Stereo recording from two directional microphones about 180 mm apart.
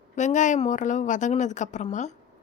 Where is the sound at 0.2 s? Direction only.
45° left (ahead or behind).